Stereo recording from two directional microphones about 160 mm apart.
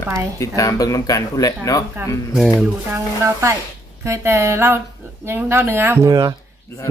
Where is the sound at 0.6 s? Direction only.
20° left (ahead or behind).